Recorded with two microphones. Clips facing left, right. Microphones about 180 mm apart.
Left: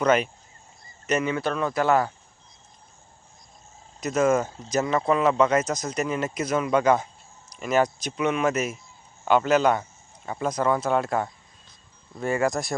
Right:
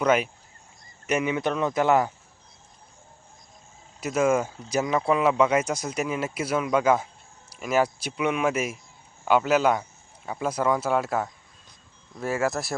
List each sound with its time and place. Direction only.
0.0 s speech: 10° right (ahead or behind)
4.0 s speech: 10° right (ahead or behind)